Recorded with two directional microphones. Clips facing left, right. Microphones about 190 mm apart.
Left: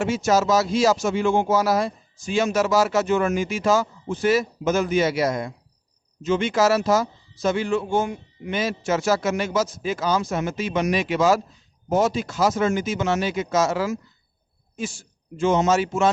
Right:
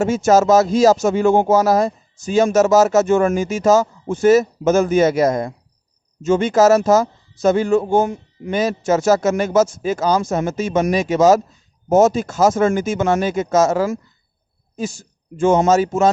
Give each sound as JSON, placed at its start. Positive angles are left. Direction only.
{"t": 0.0, "sound": "speech", "side_deg": -45}